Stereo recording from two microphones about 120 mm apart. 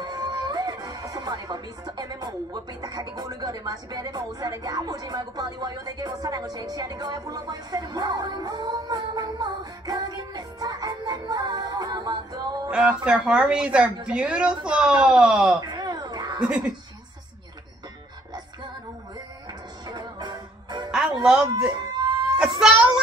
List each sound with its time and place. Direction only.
0.0 s speech: 35° right (ahead or behind)
12.7 s speech: 10° right (ahead or behind)
15.6 s a sound: 35° right (ahead or behind)
16.3 s speech: 10° right (ahead or behind)
19.9 s music: 35° right (ahead or behind)
20.9 s music: 5° right (ahead or behind)
21.7 s a sound: 35° right (ahead or behind)
22.6 s a child's voice: 5° right (ahead or behind)